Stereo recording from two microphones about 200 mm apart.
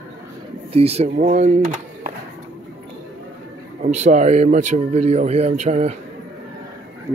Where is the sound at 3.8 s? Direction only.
35° right (ahead or behind).